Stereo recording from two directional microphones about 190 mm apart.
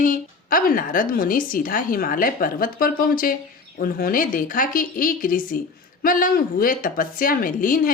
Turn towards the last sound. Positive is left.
turn(degrees=45)  # may be behind; listen again after turning